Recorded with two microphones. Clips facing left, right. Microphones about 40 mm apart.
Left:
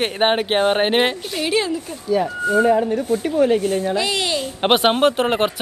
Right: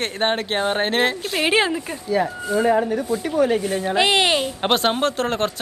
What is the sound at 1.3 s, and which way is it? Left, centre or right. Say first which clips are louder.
Speech: right 3 dB; right.